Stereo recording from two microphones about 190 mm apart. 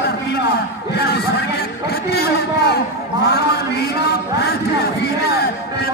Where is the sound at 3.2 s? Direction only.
55° left (ahead or behind).